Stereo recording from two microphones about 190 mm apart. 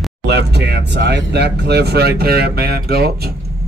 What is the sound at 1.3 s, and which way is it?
Speech, 60° right (ahead or behind).